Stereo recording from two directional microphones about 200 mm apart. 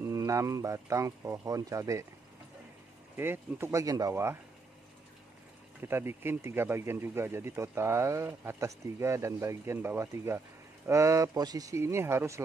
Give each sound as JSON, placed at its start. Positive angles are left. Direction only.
{"t": 0.0, "sound": "speech", "side_deg": -15}
{"t": 3.2, "sound": "speech", "side_deg": -10}
{"t": 5.8, "sound": "speech", "side_deg": -10}